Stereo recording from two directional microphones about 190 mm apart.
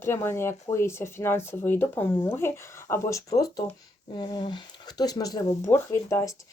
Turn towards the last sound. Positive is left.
turn(degrees=15)  # may be behind; listen again after turning